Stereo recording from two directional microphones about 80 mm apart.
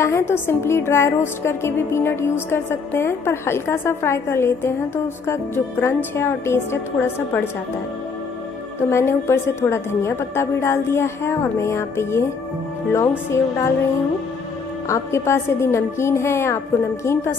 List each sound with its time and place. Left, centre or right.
0.0 s a woman's voice: left
8.7 s a woman's voice: left
14.9 s a woman's voice: left